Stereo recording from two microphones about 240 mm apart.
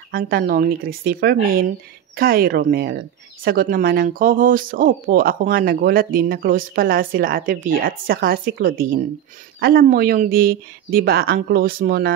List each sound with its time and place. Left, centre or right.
0.1 s speech: right